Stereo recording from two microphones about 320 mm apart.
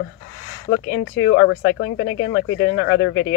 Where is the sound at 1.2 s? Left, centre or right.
Left.